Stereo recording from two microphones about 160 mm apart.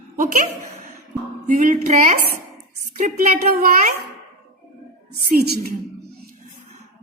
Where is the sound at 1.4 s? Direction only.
50° right (ahead or behind).